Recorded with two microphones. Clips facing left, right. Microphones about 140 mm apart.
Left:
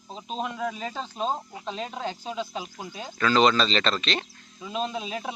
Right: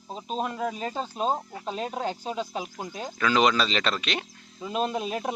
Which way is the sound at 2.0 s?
45° right (ahead or behind).